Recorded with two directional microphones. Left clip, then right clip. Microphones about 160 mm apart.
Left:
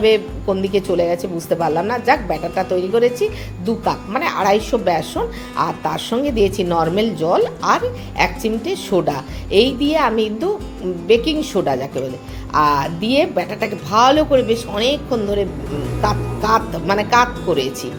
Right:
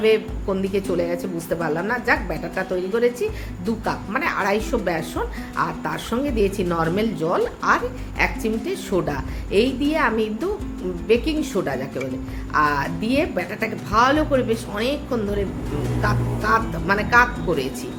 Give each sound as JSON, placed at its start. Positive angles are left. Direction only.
{"t": 0.0, "sound": "a woman's voice", "side_deg": 10}
{"t": 6.7, "sound": "a woman's voice", "side_deg": 0}